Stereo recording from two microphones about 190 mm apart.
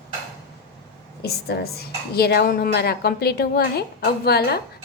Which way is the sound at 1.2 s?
55° left (ahead or behind).